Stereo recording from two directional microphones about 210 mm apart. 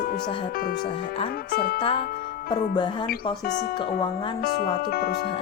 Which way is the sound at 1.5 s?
45° left (ahead or behind).